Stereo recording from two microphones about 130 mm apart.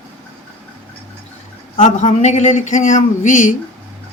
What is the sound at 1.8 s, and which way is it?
Speech, 65° left (ahead or behind).